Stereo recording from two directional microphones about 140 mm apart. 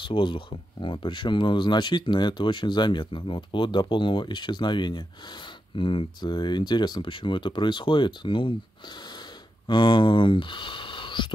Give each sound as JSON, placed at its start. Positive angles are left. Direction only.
{"t": 0.0, "sound": "speech", "side_deg": 35}
{"t": 9.7, "sound": "speech", "side_deg": 35}